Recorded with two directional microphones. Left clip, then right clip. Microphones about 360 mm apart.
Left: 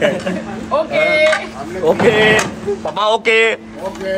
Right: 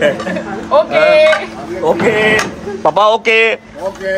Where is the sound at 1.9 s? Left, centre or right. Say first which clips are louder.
Even; centre.